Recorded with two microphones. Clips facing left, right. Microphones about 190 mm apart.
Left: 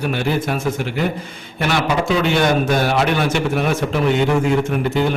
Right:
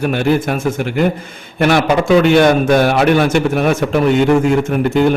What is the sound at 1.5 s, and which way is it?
A man's voice, 50° right (ahead or behind).